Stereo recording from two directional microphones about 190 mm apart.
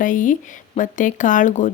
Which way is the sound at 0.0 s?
45° left (ahead or behind).